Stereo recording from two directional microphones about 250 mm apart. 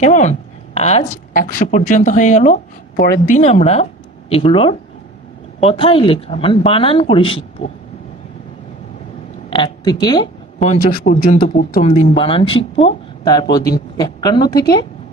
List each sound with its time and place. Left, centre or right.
0.0 s a woman's voice: left
9.5 s speech: centre
10.8 s a woman's voice: left; by 14.8 s centre